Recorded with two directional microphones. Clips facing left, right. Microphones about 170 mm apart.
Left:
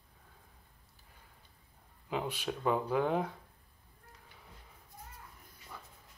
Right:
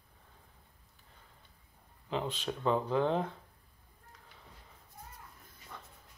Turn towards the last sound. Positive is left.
turn(degrees=5)  # may be behind; listen again after turning